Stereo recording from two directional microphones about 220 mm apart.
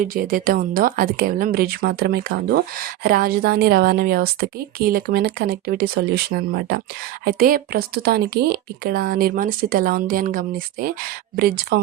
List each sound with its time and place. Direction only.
0.0 s speech: 40° right (ahead or behind)